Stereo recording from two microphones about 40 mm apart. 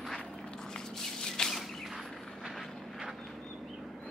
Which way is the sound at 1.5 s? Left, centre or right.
Centre.